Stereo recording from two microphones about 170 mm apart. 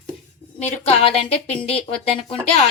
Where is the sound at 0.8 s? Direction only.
35° left (ahead or behind).